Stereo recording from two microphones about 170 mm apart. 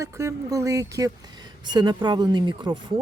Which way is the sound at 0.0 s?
20° right (ahead or behind).